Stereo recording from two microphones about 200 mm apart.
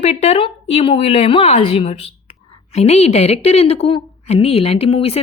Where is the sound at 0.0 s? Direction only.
30° left (ahead or behind).